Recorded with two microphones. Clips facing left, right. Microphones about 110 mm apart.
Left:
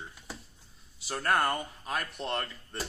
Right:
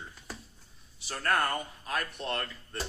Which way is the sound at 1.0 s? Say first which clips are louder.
Left 1 dB; 25° left (ahead or behind).